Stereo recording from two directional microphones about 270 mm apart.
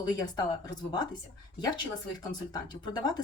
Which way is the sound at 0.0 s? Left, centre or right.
Centre.